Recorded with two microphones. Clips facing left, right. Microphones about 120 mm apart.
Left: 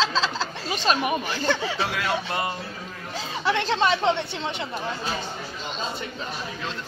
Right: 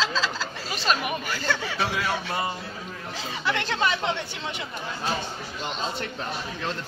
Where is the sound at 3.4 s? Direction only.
25° left (ahead or behind).